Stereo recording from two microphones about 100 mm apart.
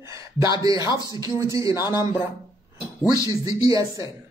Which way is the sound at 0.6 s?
40° right (ahead or behind).